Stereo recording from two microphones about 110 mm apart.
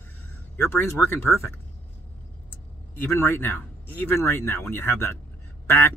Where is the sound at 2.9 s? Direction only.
20° left (ahead or behind).